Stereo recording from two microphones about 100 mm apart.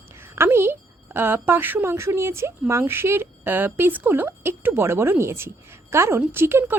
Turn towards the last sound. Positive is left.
turn(degrees=-25)  # may be behind; listen again after turning